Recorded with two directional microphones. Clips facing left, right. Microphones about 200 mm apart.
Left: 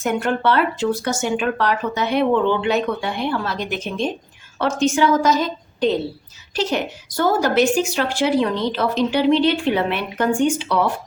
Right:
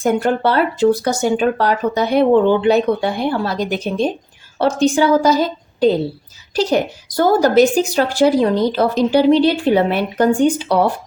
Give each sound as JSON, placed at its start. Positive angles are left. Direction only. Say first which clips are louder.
{"t": 0.0, "sound": "a woman's voice", "louder": "right 4 dB", "side_deg": -35}